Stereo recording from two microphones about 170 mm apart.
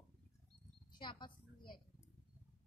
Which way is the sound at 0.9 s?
25° left (ahead or behind).